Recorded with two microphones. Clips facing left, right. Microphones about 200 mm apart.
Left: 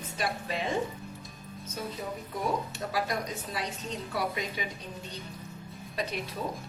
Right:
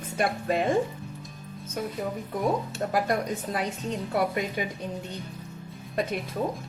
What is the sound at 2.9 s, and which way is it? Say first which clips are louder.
A woman's voice: right 6 dB; 50° right (ahead or behind).